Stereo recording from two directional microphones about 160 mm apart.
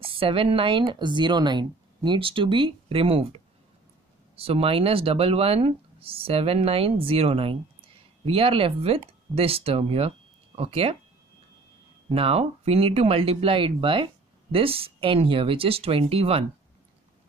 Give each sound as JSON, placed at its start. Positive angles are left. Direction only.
{"t": 0.0, "sound": "speech", "side_deg": -35}
{"t": 4.4, "sound": "speech", "side_deg": -35}
{"t": 12.1, "sound": "speech", "side_deg": -40}